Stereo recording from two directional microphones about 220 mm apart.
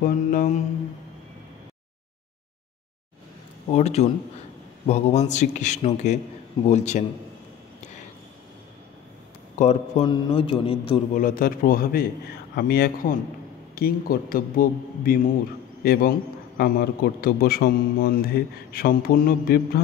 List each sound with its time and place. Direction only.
0.0 s a man's voice: 40° left (ahead or behind)
3.7 s a man's voice: 30° left (ahead or behind)
9.6 s speech: 30° left (ahead or behind)
11.1 s a man's voice: 40° left (ahead or behind)